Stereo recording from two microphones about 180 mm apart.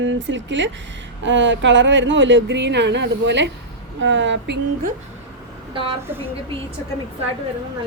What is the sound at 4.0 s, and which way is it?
Speech, 90° right.